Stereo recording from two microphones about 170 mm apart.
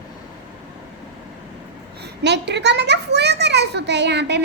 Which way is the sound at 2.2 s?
90° right.